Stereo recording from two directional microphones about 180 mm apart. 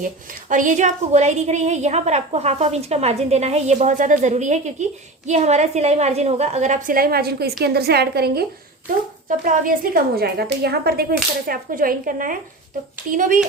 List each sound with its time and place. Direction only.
0.0 s a woman's voice: 45° right (ahead or behind); by 8.4 s 60° right (ahead or behind)
9.4 s a woman's voice: 50° right (ahead or behind)